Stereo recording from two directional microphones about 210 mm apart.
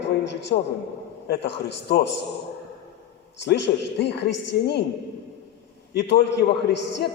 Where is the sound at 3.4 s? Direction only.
55° left (ahead or behind).